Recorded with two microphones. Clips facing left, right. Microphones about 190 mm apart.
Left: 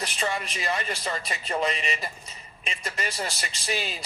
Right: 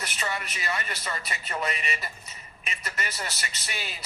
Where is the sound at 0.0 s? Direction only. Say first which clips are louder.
Left 4 dB; 30° left (ahead or behind).